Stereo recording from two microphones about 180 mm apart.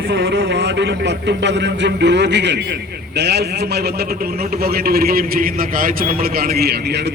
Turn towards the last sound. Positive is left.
turn(degrees=-65)  # may be behind; listen again after turning